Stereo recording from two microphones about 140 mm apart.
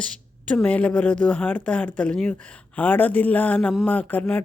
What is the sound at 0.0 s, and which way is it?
A woman's voice, 10° left (ahead or behind).